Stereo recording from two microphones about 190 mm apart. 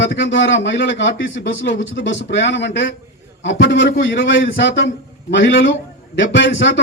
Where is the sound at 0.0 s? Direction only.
75° left (ahead or behind).